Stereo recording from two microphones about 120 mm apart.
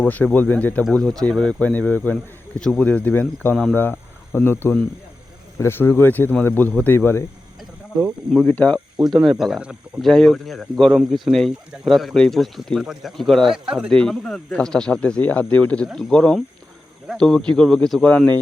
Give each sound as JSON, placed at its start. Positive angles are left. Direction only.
{"t": 0.1, "sound": "speech", "side_deg": 15}
{"t": 3.8, "sound": "speech", "side_deg": 15}
{"t": 8.0, "sound": "speech", "side_deg": 0}
{"t": 8.4, "sound": "speech", "side_deg": 10}
{"t": 9.0, "sound": "speech", "side_deg": -5}